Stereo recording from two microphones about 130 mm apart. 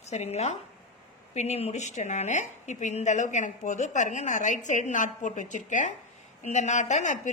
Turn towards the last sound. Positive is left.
turn(degrees=70)  # may be behind; listen again after turning